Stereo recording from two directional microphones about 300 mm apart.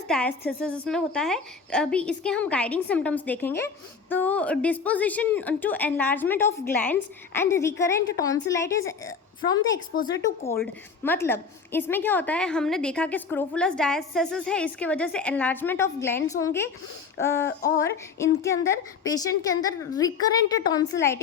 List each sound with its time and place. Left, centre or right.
0.1 s a woman's voice: centre
9.9 s speech: left
11.0 s a woman's voice: centre